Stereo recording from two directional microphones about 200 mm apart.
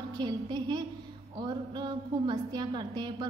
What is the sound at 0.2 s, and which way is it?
A woman's voice, 20° right (ahead or behind).